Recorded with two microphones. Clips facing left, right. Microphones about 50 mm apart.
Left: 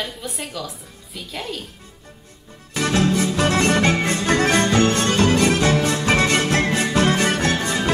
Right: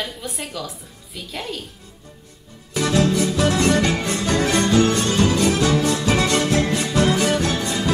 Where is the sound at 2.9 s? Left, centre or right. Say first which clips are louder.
Even; left.